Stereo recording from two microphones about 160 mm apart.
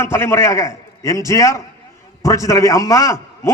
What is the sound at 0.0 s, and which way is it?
A man's voice, 15° left (ahead or behind).